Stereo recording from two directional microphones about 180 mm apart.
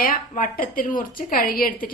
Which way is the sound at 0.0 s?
50° left (ahead or behind).